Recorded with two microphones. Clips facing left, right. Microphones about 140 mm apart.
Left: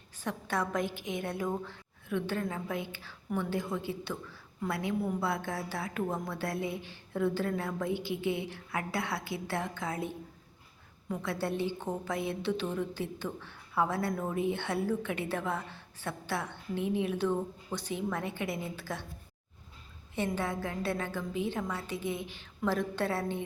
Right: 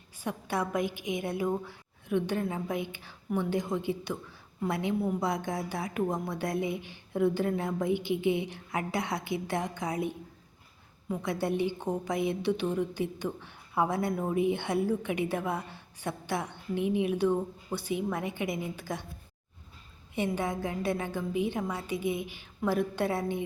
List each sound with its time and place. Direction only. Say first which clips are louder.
0.2 s a woman's voice: right 1 dB; 10° right (ahead or behind)
20.1 s a woman's voice: right 2 dB; 15° right (ahead or behind)